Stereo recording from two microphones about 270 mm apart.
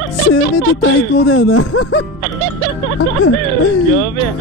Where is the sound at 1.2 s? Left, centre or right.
Left.